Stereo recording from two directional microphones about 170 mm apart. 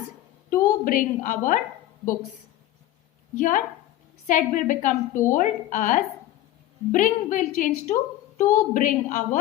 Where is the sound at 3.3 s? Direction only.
50° left (ahead or behind).